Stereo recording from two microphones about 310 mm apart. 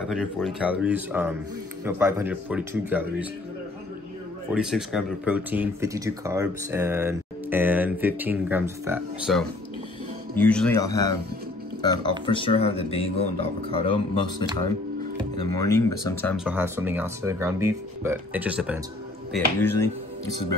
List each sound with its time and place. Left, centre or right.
0.1 s speech: centre
4.5 s speech: centre
15.5 s speech: centre
19.3 s speech: centre